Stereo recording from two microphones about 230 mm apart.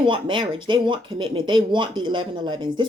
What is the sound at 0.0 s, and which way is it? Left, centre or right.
Speech, right.